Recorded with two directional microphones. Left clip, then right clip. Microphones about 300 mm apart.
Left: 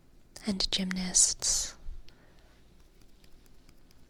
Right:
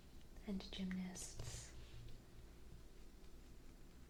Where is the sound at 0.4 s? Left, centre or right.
Left.